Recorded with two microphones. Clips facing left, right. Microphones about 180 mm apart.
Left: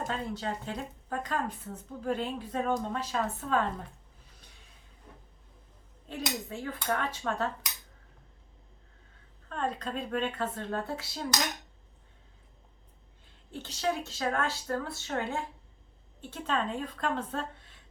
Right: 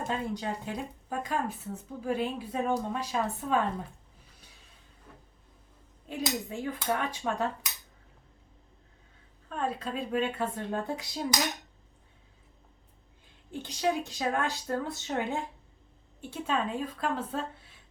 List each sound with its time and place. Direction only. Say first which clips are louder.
0.1 s speech: right 2 dB; 15° right (ahead or behind)
6.1 s speech: right 3 dB; 15° right (ahead or behind)
9.5 s speech: right 1 dB; 5° right (ahead or behind)
13.5 s speech: right 2 dB; 15° right (ahead or behind)